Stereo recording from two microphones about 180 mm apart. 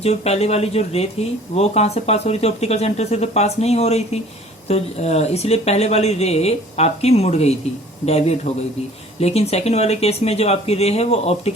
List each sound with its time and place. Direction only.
0.0 s speech: 35° left (ahead or behind)